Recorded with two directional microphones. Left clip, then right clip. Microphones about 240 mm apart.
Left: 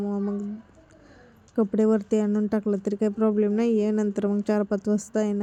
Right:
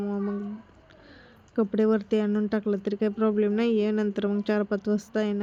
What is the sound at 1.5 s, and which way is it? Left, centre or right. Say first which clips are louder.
Speech: left 1 dB; centre.